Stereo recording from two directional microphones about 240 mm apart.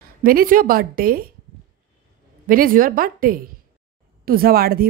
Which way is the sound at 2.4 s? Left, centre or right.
Right.